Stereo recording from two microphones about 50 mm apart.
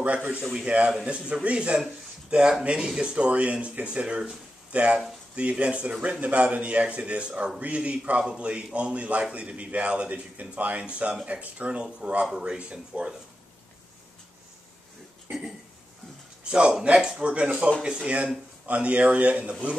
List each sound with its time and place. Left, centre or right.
0.0 s speech: right
0.4 s speech: centre
0.7 s speech: right
16.4 s speech: centre